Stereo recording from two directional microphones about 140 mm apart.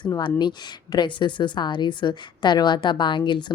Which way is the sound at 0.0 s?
35° left (ahead or behind).